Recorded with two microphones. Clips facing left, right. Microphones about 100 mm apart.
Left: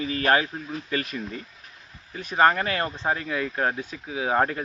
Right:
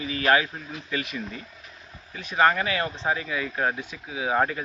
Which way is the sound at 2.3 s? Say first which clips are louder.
Left 1 dB; 25° left (ahead or behind).